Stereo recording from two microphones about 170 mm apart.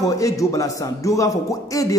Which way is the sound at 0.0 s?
20° left (ahead or behind).